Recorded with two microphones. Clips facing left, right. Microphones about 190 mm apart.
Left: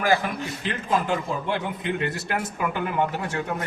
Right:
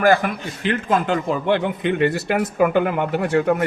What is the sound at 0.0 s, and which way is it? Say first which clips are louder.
A man's voice: right 6 dB; 60° right (ahead or behind).